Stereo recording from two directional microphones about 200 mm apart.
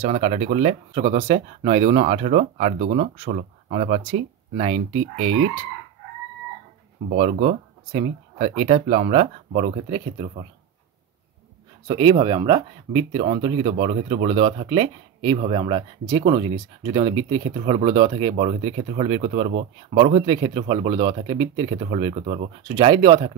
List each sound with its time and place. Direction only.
0.0 s speech: 35° right (ahead or behind)
7.2 s speech: 30° right (ahead or behind)
11.9 s speech: 25° right (ahead or behind)